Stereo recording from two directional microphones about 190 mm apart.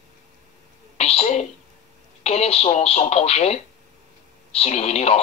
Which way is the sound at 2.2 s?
35° left (ahead or behind).